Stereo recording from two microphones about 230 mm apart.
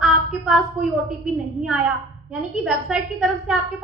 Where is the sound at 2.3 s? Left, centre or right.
Centre.